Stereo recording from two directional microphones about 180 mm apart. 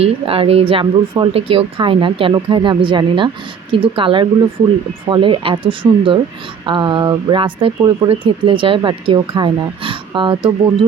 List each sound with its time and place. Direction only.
0.0 s speech: 30° right (ahead or behind)